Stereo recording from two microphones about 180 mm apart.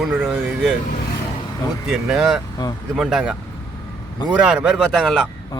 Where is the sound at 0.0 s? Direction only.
10° right (ahead or behind).